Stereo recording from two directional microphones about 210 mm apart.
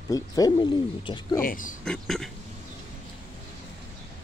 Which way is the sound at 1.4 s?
40° left (ahead or behind).